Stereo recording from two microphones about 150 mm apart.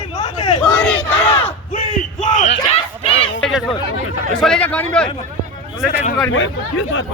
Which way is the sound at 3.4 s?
5° left (ahead or behind).